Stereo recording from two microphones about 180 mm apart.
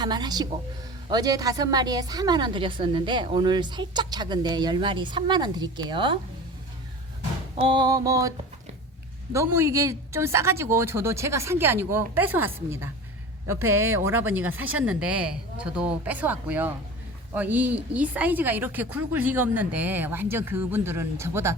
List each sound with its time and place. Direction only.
0.0 s a woman's voice: 25° right (ahead or behind)
7.6 s a woman's voice: 25° right (ahead or behind)
9.3 s speech: 15° right (ahead or behind)